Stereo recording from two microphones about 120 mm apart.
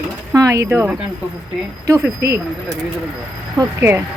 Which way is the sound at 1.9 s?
25° right (ahead or behind).